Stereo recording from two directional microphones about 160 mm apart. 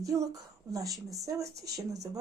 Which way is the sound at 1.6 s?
90° right.